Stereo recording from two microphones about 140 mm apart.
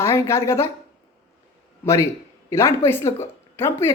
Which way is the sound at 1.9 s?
20° left (ahead or behind).